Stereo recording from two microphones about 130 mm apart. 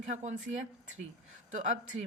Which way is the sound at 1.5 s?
65° right (ahead or behind).